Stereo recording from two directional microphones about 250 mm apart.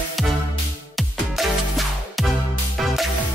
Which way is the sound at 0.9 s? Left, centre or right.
Centre.